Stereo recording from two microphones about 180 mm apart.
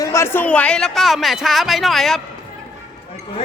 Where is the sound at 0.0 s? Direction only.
15° left (ahead or behind).